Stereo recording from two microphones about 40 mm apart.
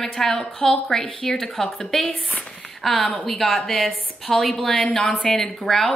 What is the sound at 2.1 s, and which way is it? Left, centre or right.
Speech, left.